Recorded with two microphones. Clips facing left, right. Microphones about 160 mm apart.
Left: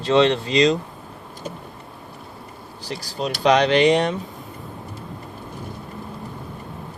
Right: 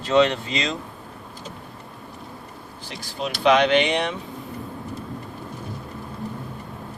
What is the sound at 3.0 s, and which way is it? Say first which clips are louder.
Speech: left 2 dB; 35° left (ahead or behind).